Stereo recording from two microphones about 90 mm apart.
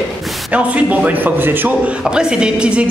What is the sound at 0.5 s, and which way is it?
A man's voice, 15° right (ahead or behind).